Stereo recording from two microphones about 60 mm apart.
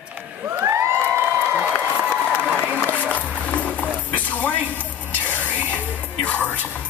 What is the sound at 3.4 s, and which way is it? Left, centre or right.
Music, left.